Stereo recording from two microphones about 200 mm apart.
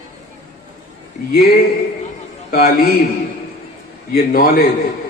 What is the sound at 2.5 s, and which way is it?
Speech, 45° left (ahead or behind).